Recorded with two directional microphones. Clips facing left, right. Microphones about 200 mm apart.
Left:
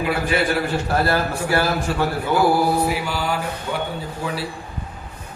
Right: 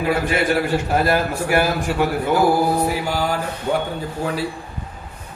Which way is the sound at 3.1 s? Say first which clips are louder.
Right 2 dB; 45° right (ahead or behind).